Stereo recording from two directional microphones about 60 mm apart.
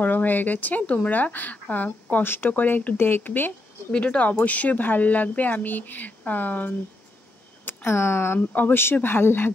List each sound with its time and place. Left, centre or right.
0.0 s speech: left
3.9 s speech: centre
7.6 s speech: left
8.4 s speech: left